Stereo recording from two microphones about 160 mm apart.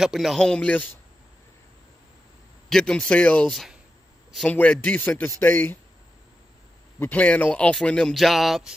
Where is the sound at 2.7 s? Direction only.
5° left (ahead or behind).